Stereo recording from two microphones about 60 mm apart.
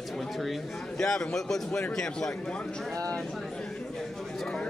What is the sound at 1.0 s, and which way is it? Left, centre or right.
Speech, centre.